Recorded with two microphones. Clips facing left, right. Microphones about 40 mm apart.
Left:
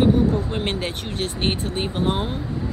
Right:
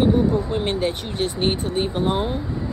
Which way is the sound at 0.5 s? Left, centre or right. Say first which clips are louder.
Right 3 dB; left.